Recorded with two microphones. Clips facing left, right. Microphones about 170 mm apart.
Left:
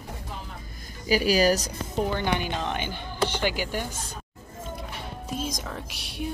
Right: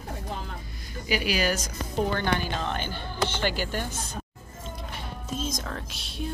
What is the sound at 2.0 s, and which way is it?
A woman's voice, 15° left (ahead or behind).